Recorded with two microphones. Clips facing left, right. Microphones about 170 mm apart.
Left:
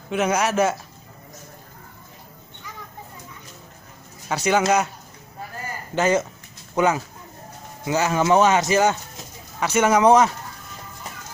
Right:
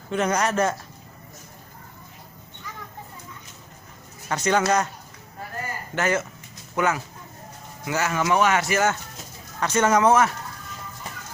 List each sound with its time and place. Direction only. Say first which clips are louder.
0.1 s speech: left 2 dB; 5° left (ahead or behind)
4.3 s speech: left 2 dB; 10° left (ahead or behind)
5.9 s speech: left 5 dB; 20° left (ahead or behind)